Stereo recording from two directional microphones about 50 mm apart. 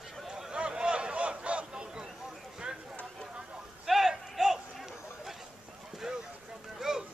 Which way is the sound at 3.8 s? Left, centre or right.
Centre.